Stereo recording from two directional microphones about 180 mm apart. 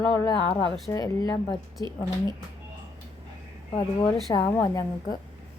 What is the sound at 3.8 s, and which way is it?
Speech, 25° left (ahead or behind).